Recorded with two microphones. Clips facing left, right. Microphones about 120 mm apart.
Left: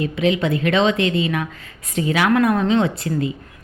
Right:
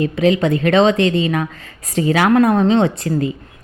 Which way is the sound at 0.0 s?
40° right (ahead or behind).